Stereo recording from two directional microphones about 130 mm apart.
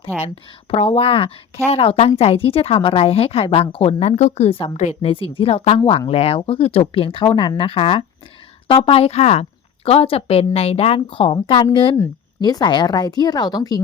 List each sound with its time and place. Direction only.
0.7 s speech: 50° left (ahead or behind); by 13.7 s 30° left (ahead or behind)